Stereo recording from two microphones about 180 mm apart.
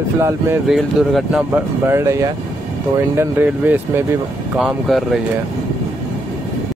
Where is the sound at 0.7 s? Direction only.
Centre (ahead or behind).